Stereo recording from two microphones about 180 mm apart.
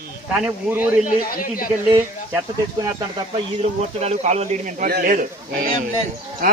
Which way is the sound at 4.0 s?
35° right (ahead or behind).